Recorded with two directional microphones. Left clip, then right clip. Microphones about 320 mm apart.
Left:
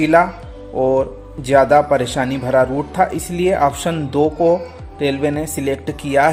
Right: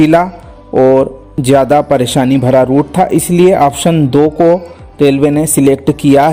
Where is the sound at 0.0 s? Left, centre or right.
Right.